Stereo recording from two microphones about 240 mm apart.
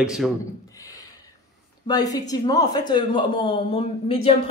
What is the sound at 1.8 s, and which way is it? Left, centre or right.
A woman's voice, centre.